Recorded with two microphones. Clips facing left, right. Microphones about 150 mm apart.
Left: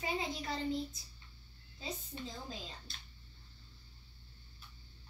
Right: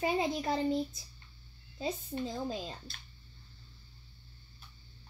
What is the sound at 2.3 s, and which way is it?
Speech, 55° right (ahead or behind).